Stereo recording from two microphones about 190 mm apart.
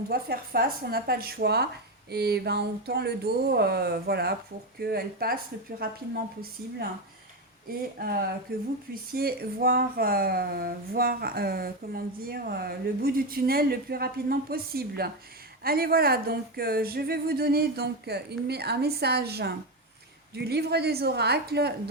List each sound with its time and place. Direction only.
0.1 s speech: 55° right (ahead or behind)
7.7 s speech: 50° right (ahead or behind)